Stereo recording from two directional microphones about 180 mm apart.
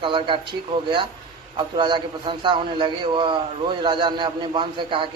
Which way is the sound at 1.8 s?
25° right (ahead or behind).